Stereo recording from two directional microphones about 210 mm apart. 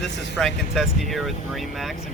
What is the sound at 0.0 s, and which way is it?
Speech, centre (ahead or behind).